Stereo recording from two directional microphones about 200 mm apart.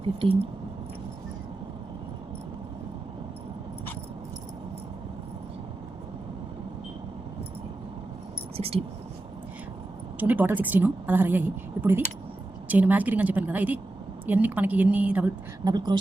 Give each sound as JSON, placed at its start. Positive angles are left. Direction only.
{"t": 0.0, "sound": "speech", "side_deg": -25}
{"t": 8.5, "sound": "whispering", "side_deg": -30}
{"t": 10.2, "sound": "a woman's voice", "side_deg": -10}
{"t": 15.6, "sound": "speech", "side_deg": -20}